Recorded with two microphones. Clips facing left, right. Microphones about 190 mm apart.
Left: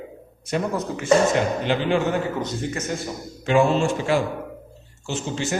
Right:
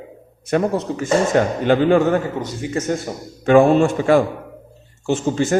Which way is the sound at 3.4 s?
55° right (ahead or behind).